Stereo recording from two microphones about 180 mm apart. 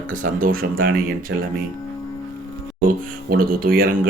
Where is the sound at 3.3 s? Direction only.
55° right (ahead or behind).